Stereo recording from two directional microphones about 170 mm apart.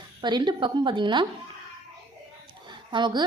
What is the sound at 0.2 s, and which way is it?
A woman's voice, 25° right (ahead or behind).